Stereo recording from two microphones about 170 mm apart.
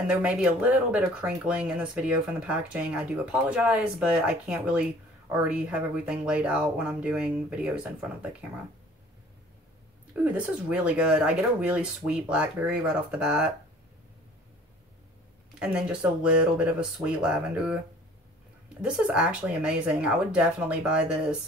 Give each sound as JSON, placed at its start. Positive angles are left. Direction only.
{"t": 0.0, "sound": "speech", "side_deg": -5}
{"t": 10.1, "sound": "speech", "side_deg": -10}
{"t": 15.6, "sound": "speech", "side_deg": -5}
{"t": 18.8, "sound": "speech", "side_deg": -5}